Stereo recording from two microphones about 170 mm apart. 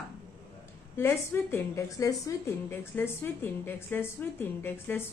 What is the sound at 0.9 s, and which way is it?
A woman's voice, 15° left (ahead or behind).